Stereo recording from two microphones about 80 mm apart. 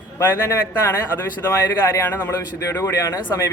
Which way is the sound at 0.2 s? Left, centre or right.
Left.